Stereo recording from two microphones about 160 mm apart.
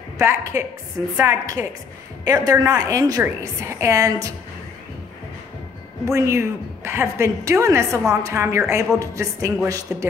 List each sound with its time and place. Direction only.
0.2 s a woman's voice: 15° right (ahead or behind)
6.0 s a woman's voice: 15° right (ahead or behind)